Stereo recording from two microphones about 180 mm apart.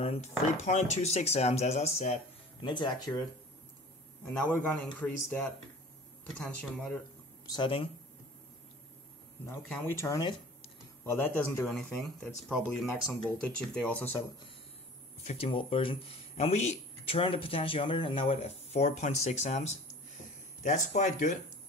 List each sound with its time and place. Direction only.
0.0 s speech: 35° left (ahead or behind)
2.6 s speech: 25° left (ahead or behind)
4.3 s speech: 10° left (ahead or behind)
7.4 s speech: 25° left (ahead or behind)
9.5 s speech: 15° left (ahead or behind)
15.2 s speech: 35° left (ahead or behind)